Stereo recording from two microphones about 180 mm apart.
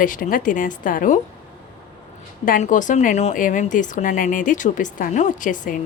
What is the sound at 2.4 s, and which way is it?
Speech, 45° left (ahead or behind).